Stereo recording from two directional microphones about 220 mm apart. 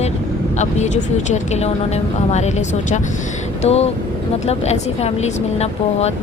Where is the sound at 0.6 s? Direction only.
30° left (ahead or behind).